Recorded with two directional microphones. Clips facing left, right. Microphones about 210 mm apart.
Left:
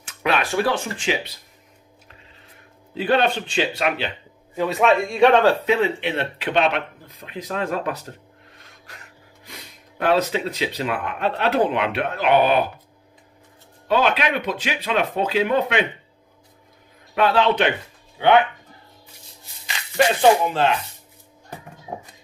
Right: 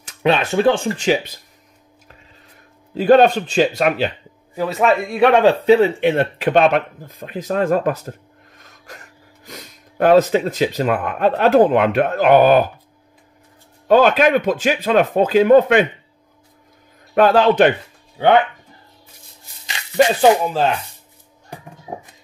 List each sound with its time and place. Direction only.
0.2 s speech: 25° right (ahead or behind); by 1.3 s 40° right (ahead or behind)
2.9 s speech: 45° right (ahead or behind)
4.6 s a man's voice: centre (ahead or behind)
5.7 s speech: 45° right (ahead or behind)
9.4 s speech: 45° right (ahead or behind)
13.8 s speech: 45° right (ahead or behind)
17.1 s a man's voice: 45° right (ahead or behind)
20.2 s speech: 35° right (ahead or behind)